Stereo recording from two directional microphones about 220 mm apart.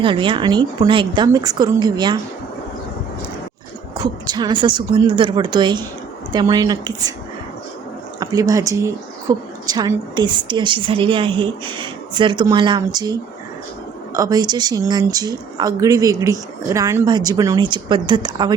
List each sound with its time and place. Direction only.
0.0 s a woman's voice: 20° right (ahead or behind)
3.9 s a woman's voice: 20° right (ahead or behind)
8.2 s a woman's voice: 15° right (ahead or behind)